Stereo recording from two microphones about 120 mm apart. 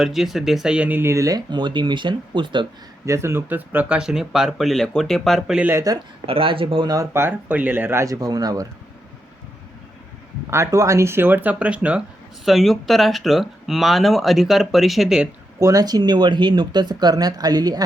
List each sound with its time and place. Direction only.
0.0 s speech: centre (ahead or behind); by 2.6 s 40° right (ahead or behind)
3.1 s speech: 20° right (ahead or behind); by 5.5 s centre (ahead or behind)
5.5 s speech: 15° right (ahead or behind)
6.2 s speech: 50° right (ahead or behind)
6.8 s speech: 30° right (ahead or behind)
10.5 s speech: 25° right (ahead or behind); by 15.3 s 5° right (ahead or behind)
15.5 s speech: 30° right (ahead or behind)